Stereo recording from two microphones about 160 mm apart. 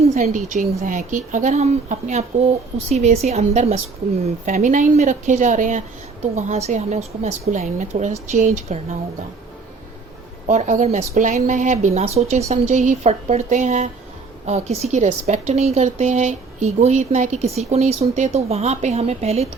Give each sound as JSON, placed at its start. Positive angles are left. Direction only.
{"t": 0.0, "sound": "a woman's voice", "side_deg": -45}
{"t": 10.4, "sound": "a woman's voice", "side_deg": -50}